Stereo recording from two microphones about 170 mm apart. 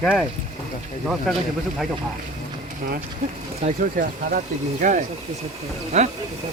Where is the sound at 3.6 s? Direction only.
50° right (ahead or behind).